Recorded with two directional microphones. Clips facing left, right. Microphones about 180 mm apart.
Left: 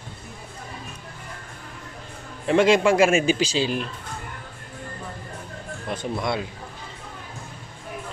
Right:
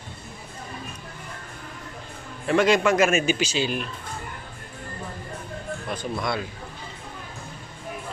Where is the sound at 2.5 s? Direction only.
25° left (ahead or behind).